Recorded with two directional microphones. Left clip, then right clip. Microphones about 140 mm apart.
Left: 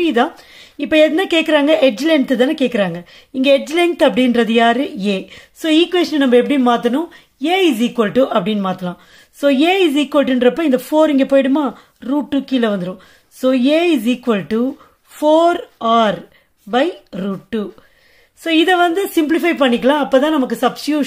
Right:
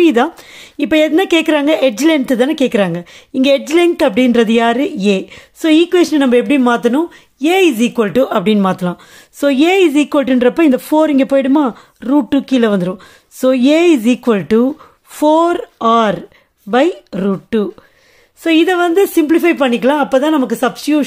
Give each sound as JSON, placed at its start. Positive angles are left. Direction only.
{"t": 0.0, "sound": "speech", "side_deg": -40}